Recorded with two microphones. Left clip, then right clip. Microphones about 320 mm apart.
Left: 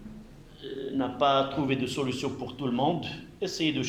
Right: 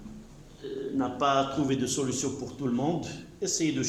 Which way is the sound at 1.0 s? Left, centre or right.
Centre.